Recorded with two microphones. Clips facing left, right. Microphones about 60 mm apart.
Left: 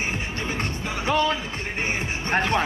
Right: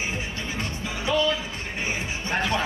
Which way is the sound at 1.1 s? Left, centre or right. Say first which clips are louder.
Left 1 dB; left.